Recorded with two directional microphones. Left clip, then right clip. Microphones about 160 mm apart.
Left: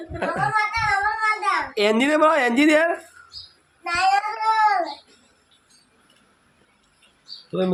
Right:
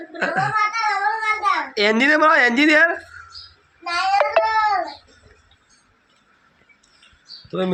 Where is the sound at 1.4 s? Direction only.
10° left (ahead or behind).